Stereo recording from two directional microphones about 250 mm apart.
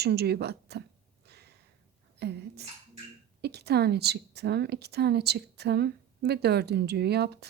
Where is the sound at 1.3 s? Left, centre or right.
Right.